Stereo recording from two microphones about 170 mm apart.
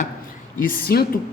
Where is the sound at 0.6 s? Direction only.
60° left (ahead or behind).